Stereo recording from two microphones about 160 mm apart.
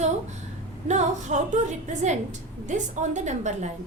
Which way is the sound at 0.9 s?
45° right (ahead or behind).